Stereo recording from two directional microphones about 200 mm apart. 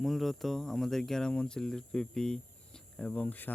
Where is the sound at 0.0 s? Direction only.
Centre (ahead or behind).